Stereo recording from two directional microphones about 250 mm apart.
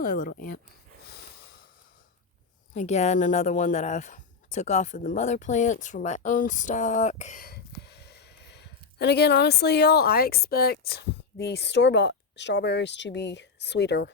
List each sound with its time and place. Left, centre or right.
0.0 s speech: left
2.7 s speech: left